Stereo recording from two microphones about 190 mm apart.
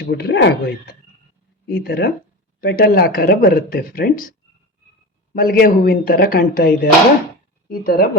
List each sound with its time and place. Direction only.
0.1 s speech: 60° left (ahead or behind)
5.3 s speech: 50° left (ahead or behind)